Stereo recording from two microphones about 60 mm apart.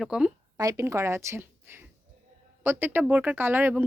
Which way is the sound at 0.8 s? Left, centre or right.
Right.